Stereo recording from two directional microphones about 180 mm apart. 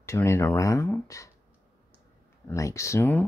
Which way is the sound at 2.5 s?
15° left (ahead or behind).